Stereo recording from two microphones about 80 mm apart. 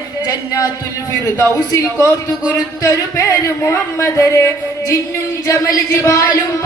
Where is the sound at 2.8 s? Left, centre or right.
Left.